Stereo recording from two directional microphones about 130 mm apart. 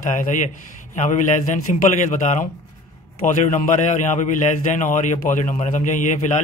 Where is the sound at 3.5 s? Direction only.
70° left (ahead or behind).